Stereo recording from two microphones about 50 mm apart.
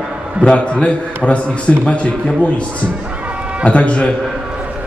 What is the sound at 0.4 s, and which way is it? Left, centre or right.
A man's voice, left.